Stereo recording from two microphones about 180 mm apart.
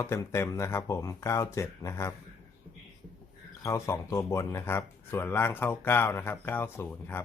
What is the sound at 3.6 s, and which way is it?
Speech, 15° left (ahead or behind).